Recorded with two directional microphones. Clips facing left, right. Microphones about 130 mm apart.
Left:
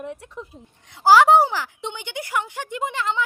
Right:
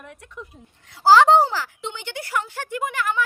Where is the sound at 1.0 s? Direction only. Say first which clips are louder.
Even; 10° left (ahead or behind).